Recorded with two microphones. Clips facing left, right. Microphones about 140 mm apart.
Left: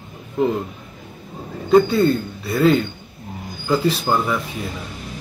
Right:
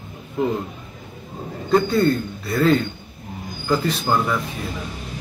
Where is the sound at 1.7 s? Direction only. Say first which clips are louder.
Left 3 dB; centre (ahead or behind).